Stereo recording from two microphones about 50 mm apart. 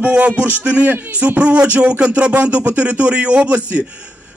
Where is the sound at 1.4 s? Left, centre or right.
Right.